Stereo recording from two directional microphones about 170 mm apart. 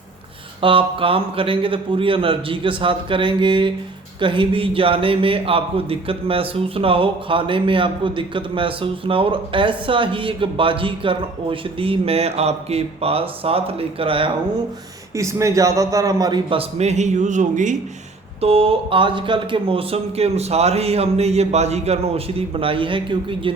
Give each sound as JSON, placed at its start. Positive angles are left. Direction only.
{"t": 0.6, "sound": "speech", "side_deg": -30}
{"t": 15.1, "sound": "a man's voice", "side_deg": -15}
{"t": 18.3, "sound": "speech", "side_deg": -35}